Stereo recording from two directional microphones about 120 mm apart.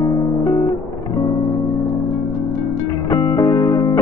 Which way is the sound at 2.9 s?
30° left (ahead or behind).